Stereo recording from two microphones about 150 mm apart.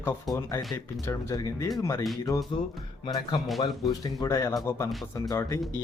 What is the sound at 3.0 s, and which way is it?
Speech, 35° left (ahead or behind).